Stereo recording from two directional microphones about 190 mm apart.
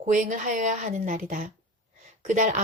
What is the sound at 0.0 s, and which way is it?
A woman's voice, 40° right (ahead or behind).